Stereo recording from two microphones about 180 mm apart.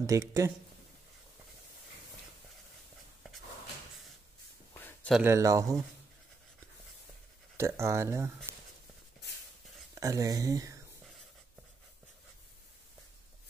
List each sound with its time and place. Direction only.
0.0 s speech: 15° right (ahead or behind)
4.7 s a sound: 10° left (ahead or behind)
5.2 s speech: 15° right (ahead or behind)
7.5 s speech: 15° right (ahead or behind)
9.9 s speech: 20° right (ahead or behind)